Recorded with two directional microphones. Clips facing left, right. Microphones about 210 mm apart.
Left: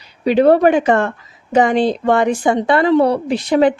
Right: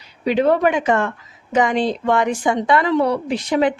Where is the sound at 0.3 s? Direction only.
35° left (ahead or behind).